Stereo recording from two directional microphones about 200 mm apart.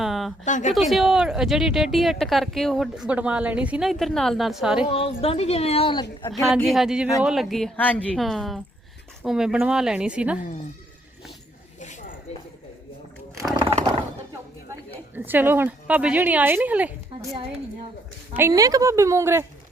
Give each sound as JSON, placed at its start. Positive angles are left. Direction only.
{"t": 0.0, "sound": "a sound", "side_deg": 0}
{"t": 0.4, "sound": "speech", "side_deg": 40}
{"t": 0.7, "sound": "speech", "side_deg": 0}
{"t": 4.9, "sound": "a woman's voice", "side_deg": 30}
{"t": 6.7, "sound": "speech", "side_deg": 0}
{"t": 11.8, "sound": "a sound", "side_deg": 35}
{"t": 13.4, "sound": "roaring cats", "side_deg": -30}
{"t": 15.1, "sound": "speech", "side_deg": -10}
{"t": 18.3, "sound": "speech", "side_deg": -15}